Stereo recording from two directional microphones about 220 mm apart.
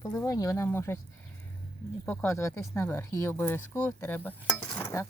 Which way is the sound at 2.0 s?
10° left (ahead or behind).